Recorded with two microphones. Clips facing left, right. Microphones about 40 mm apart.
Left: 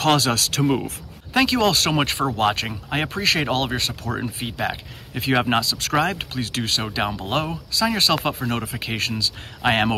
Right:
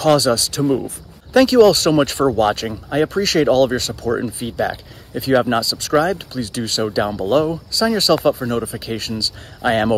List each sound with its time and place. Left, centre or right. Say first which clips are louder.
0.0 s speech: right 5 dB; left
1.3 s speech: right 8 dB; left
6.8 s speech: right 6 dB; left